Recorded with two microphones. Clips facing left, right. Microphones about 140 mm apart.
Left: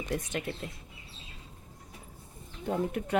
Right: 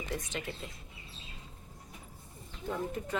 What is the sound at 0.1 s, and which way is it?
Speech, 60° left (ahead or behind).